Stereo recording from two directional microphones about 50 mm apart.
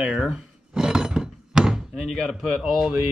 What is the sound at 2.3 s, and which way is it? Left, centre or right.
Speech, centre.